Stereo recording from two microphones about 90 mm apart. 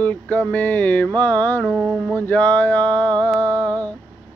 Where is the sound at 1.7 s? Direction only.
Centre (ahead or behind).